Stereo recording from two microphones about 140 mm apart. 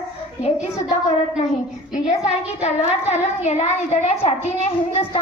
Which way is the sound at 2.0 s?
50° left (ahead or behind).